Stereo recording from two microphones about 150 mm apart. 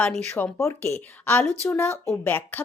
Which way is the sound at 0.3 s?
10° left (ahead or behind).